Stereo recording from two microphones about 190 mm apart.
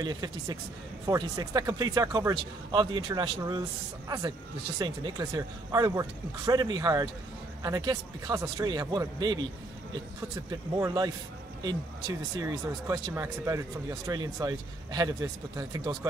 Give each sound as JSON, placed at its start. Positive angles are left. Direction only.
{"t": 0.0, "sound": "speech", "side_deg": -20}
{"t": 4.7, "sound": "speech", "side_deg": -20}
{"t": 10.8, "sound": "speech", "side_deg": -20}
{"t": 12.4, "sound": "speech", "side_deg": -15}